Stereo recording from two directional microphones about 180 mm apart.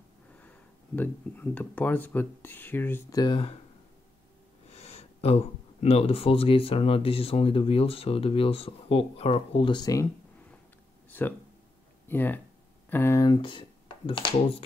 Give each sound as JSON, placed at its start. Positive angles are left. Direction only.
{"t": 0.9, "sound": "speech", "side_deg": 10}
{"t": 4.6, "sound": "speech", "side_deg": 35}
{"t": 11.1, "sound": "speech", "side_deg": 10}